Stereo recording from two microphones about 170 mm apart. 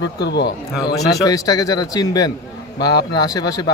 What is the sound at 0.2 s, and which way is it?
Speech, 75° left (ahead or behind).